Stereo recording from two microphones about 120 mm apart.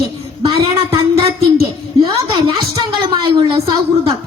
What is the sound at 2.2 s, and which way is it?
A woman's voice, 35° right (ahead or behind).